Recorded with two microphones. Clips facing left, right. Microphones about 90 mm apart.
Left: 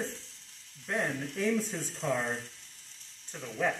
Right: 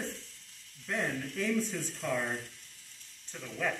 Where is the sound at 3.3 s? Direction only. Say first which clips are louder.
Left 3 dB; 25° left (ahead or behind).